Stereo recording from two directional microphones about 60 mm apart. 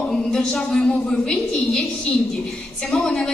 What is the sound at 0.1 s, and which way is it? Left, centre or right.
A woman's voice, centre.